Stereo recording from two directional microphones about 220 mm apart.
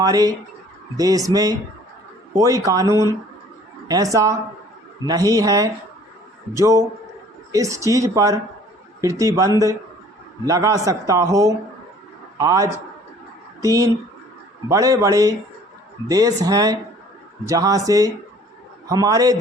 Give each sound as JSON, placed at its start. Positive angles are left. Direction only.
{"t": 0.0, "sound": "a man's voice", "side_deg": -15}